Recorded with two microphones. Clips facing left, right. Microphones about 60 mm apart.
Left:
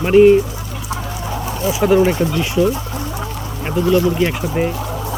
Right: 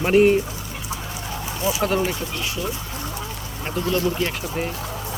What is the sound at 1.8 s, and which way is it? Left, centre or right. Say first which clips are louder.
Speech: left 10 dB; centre.